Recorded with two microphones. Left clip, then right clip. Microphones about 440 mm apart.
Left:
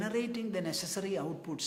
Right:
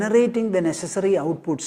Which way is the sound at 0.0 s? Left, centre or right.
Right.